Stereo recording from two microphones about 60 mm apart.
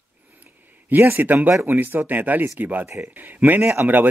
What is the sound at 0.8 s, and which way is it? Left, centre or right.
Speech, right.